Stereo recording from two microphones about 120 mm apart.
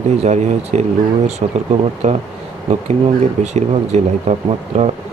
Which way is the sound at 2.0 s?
70° right (ahead or behind).